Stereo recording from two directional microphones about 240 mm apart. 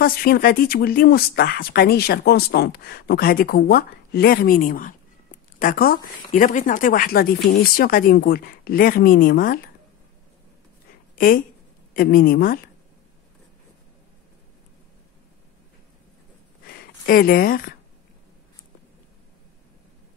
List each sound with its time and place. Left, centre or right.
0.0 s speech: left
11.1 s speech: left
16.6 s speech: left